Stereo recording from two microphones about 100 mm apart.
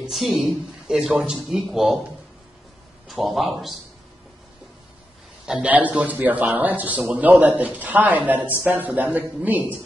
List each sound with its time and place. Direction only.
0.0 s speech: centre (ahead or behind)
3.1 s speech: centre (ahead or behind)
5.4 s a man's voice: 10° right (ahead or behind)